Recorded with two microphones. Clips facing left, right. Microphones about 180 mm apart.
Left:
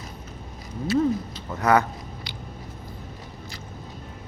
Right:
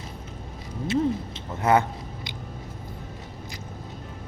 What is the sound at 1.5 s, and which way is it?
Speech, 25° right (ahead or behind).